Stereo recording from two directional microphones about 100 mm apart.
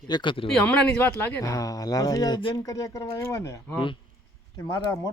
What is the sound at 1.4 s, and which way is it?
Speech, 35° left (ahead or behind).